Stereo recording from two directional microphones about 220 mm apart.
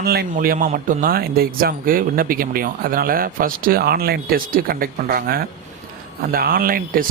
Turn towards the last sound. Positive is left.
turn(degrees=-40)  # may be behind; listen again after turning